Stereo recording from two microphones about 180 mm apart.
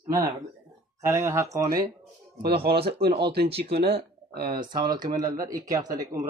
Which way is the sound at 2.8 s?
30° right (ahead or behind).